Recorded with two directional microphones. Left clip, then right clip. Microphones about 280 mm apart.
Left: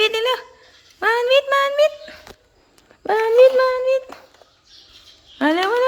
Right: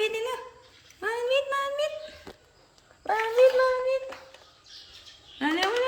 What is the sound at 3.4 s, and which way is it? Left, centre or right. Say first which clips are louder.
Speech: left 7 dB; left.